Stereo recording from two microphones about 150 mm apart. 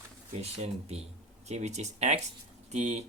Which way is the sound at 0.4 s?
45° right (ahead or behind).